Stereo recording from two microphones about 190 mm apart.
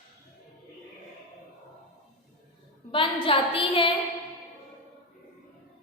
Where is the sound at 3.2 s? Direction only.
30° left (ahead or behind).